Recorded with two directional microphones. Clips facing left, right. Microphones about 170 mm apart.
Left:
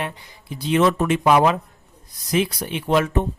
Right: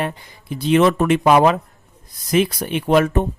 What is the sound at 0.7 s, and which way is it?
Speech, 65° right (ahead or behind).